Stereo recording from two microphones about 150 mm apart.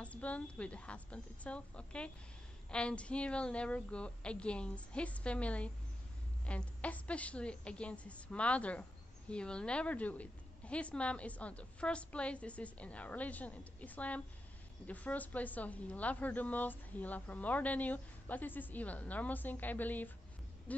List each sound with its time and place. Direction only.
0.0 s a woman's voice: 10° left (ahead or behind)